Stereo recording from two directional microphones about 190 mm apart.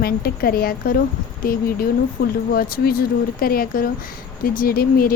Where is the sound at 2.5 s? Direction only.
50° left (ahead or behind).